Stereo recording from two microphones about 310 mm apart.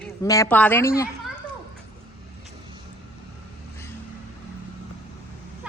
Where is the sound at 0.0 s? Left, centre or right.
Centre.